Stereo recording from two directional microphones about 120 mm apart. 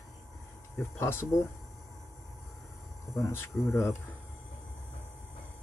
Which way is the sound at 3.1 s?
20° left (ahead or behind).